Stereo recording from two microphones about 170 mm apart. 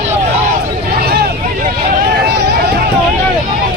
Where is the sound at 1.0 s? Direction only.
65° right (ahead or behind).